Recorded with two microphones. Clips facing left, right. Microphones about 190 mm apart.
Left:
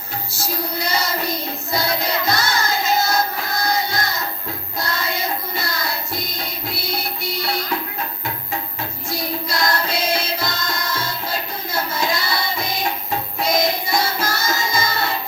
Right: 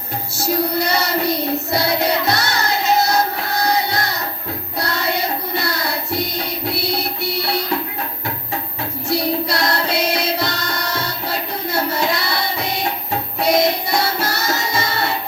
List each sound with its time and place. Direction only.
0.3 s child singing: 60° right (ahead or behind)
4.8 s music: 70° right (ahead or behind)
9.0 s music: 70° right (ahead or behind)